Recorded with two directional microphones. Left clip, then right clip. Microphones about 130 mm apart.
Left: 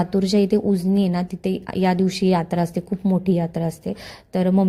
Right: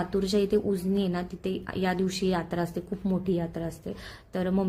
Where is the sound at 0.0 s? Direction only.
45° left (ahead or behind).